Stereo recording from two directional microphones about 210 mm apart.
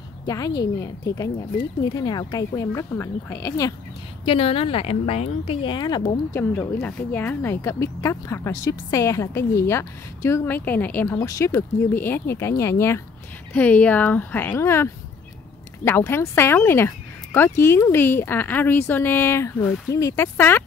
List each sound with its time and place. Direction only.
0.3 s speech: 15° left (ahead or behind)
4.3 s speech: 25° left (ahead or behind)
6.8 s speech: 10° left (ahead or behind)